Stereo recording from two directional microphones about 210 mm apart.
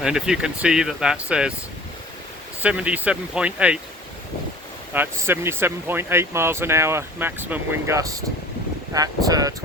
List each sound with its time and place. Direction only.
0.0 s speech: 5° right (ahead or behind)
2.6 s speech: 5° right (ahead or behind)
4.9 s speech: 10° right (ahead or behind)